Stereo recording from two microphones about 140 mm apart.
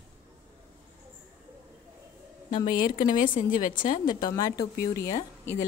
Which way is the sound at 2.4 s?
75° left (ahead or behind).